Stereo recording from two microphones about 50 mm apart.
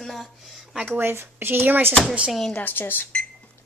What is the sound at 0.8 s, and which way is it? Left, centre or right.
Speech, right.